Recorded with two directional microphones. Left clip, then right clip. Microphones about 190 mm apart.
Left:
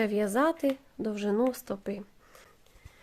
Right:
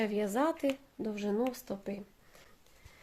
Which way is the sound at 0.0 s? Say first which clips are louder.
Left 5 dB; 35° left (ahead or behind).